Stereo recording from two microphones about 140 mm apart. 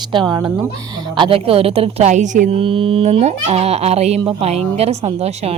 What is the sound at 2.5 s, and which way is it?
Speech, 40° right (ahead or behind).